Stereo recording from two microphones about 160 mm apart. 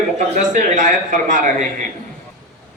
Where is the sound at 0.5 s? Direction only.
55° right (ahead or behind).